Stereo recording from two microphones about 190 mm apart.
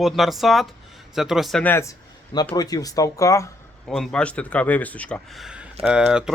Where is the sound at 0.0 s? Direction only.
Centre (ahead or behind); by 3.5 s 15° left (ahead or behind).